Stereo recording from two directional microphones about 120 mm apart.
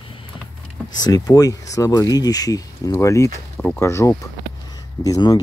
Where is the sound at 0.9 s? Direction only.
35° left (ahead or behind).